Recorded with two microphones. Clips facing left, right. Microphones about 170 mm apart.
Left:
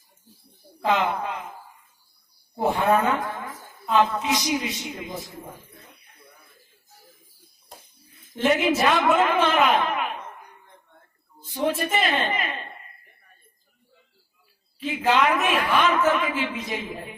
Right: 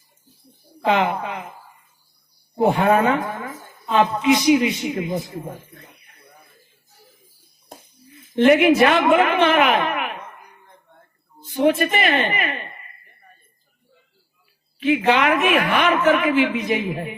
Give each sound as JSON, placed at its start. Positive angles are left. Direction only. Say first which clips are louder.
{"t": 0.9, "sound": "a woman's voice", "louder": "right 3 dB", "side_deg": -65}
{"t": 2.6, "sound": "a woman's voice", "louder": "right 4 dB", "side_deg": -65}
{"t": 8.4, "sound": "a woman's voice", "louder": "right 8 dB", "side_deg": -70}
{"t": 11.4, "sound": "a woman's voice", "louder": "right 7 dB", "side_deg": -70}
{"t": 14.8, "sound": "a woman's voice", "louder": "right 4 dB", "side_deg": -65}